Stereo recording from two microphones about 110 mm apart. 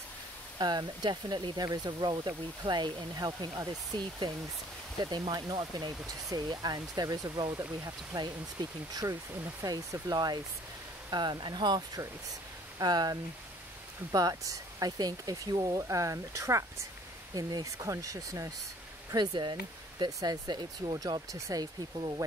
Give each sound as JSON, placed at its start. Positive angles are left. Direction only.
{"t": 0.6, "sound": "speech", "side_deg": -40}
{"t": 8.6, "sound": "speech", "side_deg": -45}
{"t": 9.4, "sound": "speech", "side_deg": -25}
{"t": 19.1, "sound": "speech", "side_deg": -40}